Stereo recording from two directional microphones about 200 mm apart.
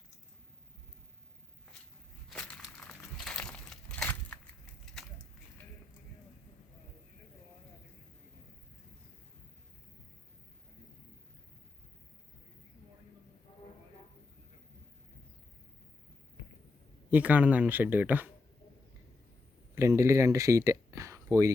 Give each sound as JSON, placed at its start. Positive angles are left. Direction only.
{"t": 2.3, "sound": "crumpling", "side_deg": 5}
{"t": 13.5, "sound": "a sound", "side_deg": 25}
{"t": 17.1, "sound": "speech", "side_deg": -10}
{"t": 19.7, "sound": "speech", "side_deg": -15}